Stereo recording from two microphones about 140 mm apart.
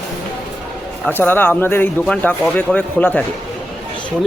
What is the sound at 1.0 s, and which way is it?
Speech, 15° left (ahead or behind).